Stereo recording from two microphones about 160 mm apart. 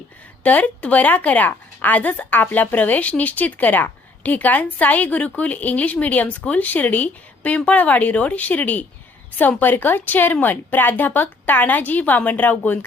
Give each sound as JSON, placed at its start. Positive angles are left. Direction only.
{"t": 0.4, "sound": "a woman's voice", "side_deg": 10}